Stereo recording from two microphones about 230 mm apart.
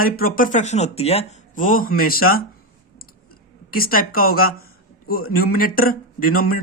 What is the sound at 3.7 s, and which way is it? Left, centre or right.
Speech, left.